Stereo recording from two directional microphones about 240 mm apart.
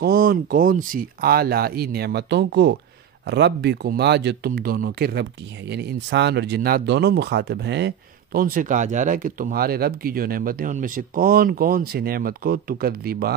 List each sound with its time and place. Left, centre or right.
0.0 s speech: right